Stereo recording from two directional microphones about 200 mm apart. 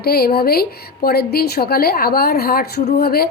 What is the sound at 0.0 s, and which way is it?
A woman's voice, 50° left (ahead or behind).